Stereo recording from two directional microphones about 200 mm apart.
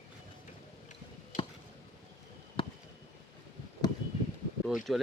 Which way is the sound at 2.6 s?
25° left (ahead or behind).